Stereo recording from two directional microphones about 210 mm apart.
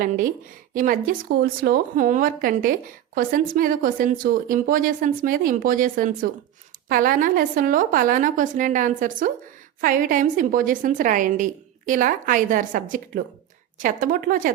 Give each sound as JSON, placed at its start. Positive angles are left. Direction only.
{"t": 0.7, "sound": "a woman's voice", "side_deg": -40}